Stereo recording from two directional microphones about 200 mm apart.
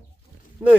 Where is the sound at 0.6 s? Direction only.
10° right (ahead or behind).